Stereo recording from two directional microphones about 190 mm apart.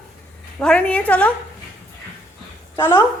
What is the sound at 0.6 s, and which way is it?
Speech, 5° left (ahead or behind).